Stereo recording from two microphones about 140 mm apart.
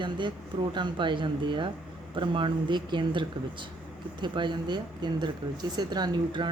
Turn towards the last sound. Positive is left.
turn(degrees=-30)  # may be behind; listen again after turning